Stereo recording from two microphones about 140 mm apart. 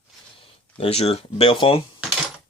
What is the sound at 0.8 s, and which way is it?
Speech, 45° left (ahead or behind).